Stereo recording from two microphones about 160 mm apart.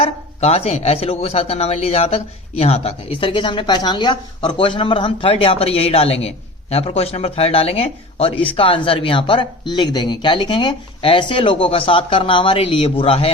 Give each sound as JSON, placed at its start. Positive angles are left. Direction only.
{"t": 0.0, "sound": "speech", "side_deg": 40}